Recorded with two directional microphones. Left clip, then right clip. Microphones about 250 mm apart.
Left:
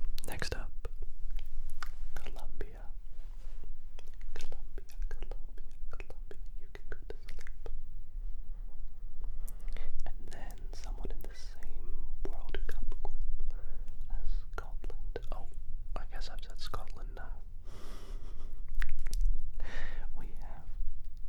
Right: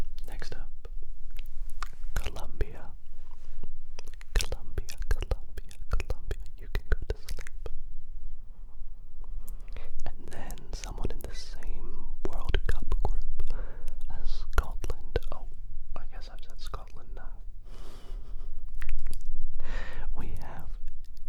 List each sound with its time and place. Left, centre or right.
0.3 s whispering: centre
1.8 s whispering: right
2.1 s whispering: right
3.9 s whispering: right
9.4 s whispering: right
10.0 s whispering: right
15.9 s whispering: centre
18.8 s chewing: centre
19.5 s whispering: right